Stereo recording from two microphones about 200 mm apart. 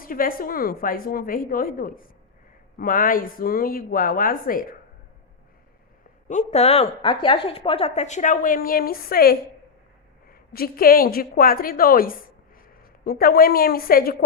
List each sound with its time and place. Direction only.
0.0 s a woman's voice: 45° left (ahead or behind)
6.5 s a woman's voice: 30° left (ahead or behind); by 9.4 s 50° left (ahead or behind)
10.5 s a woman's voice: 50° left (ahead or behind)